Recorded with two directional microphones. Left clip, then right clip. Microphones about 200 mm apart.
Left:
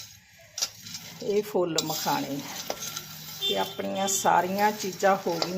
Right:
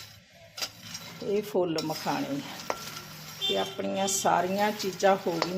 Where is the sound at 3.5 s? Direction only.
10° left (ahead or behind).